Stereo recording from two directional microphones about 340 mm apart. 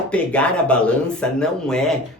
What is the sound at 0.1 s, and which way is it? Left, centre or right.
Speech, centre.